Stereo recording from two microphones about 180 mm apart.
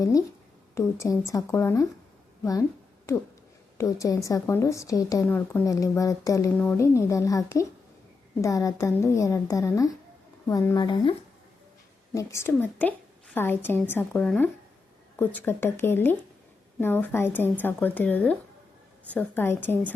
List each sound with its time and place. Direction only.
0.0 s a woman's voice: 20° left (ahead or behind)
3.8 s a woman's voice: 20° left (ahead or behind)
10.8 s speech: 25° left (ahead or behind)
12.1 s a woman's voice: 15° left (ahead or behind)